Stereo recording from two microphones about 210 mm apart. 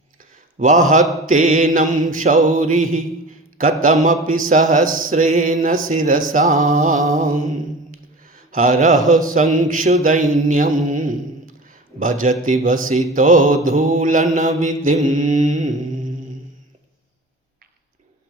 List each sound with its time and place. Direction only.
0.5 s music: 35° right (ahead or behind)
4.0 s music: 40° right (ahead or behind)
8.3 s mantra: 40° right (ahead or behind)
9.0 s a sound: 35° right (ahead or behind)
11.9 s music: 40° right (ahead or behind)